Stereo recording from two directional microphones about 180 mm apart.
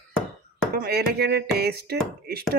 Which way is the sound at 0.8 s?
60° right (ahead or behind).